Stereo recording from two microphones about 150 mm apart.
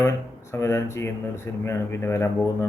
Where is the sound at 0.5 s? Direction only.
20° left (ahead or behind).